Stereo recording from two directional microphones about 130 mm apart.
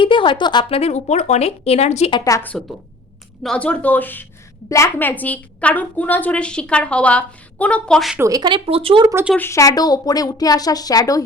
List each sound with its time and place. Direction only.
0.0 s speech: 40° left (ahead or behind); by 2.0 s 55° left (ahead or behind)
2.4 s a woman's voice: 10° left (ahead or behind)
8.2 s speech: 30° right (ahead or behind)
9.4 s speech: 25° left (ahead or behind)